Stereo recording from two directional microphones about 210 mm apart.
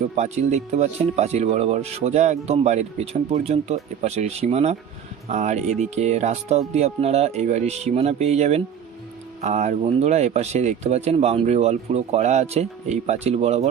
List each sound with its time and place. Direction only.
0.2 s speech: 35° right (ahead or behind)